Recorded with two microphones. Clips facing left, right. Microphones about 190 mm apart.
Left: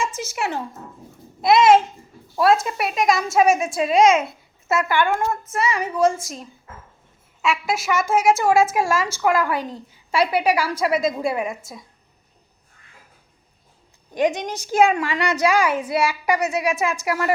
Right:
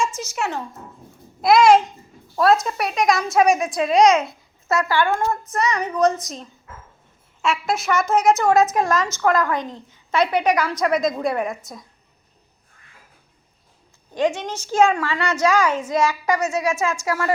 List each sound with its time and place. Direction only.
0.3 s a woman's voice: 10° left (ahead or behind)
1.4 s speech: centre (ahead or behind)
3.9 s a child's voice: 25° left (ahead or behind)
5.5 s a woman's voice: 5° left (ahead or behind)
7.7 s a woman's voice: 5° left (ahead or behind)
14.1 s a woman's voice: 15° left (ahead or behind)